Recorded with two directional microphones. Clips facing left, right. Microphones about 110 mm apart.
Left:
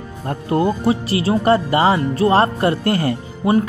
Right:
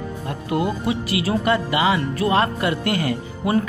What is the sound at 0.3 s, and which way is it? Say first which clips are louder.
Speech: left 5 dB; 35° left (ahead or behind).